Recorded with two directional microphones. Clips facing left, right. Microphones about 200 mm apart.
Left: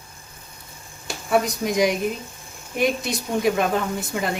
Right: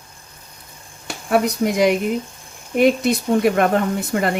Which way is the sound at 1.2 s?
60° right (ahead or behind).